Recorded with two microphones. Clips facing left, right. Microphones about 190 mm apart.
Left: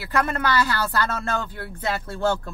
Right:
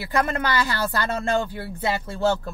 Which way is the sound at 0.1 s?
20° right (ahead or behind).